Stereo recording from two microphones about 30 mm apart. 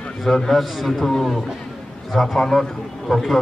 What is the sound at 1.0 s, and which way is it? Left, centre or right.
A man's voice, centre.